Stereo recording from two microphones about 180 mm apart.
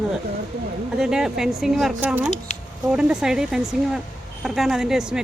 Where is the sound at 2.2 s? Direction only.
40° left (ahead or behind).